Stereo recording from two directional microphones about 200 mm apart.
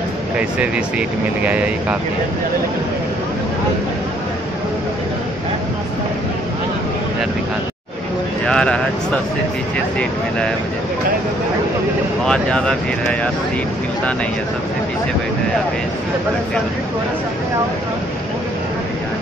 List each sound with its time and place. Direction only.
0.4 s speech: 5° right (ahead or behind)
8.5 s speech: 5° left (ahead or behind)
12.3 s speech: 5° left (ahead or behind)